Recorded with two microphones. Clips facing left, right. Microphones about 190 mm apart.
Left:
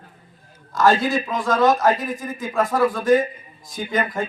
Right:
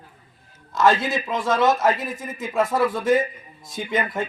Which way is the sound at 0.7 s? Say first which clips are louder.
Left 2 dB; 20° right (ahead or behind).